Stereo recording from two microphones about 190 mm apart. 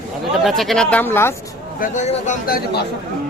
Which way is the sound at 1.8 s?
40° left (ahead or behind).